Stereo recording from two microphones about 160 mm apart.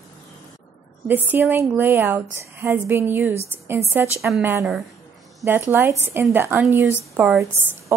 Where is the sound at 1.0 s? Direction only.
10° right (ahead or behind).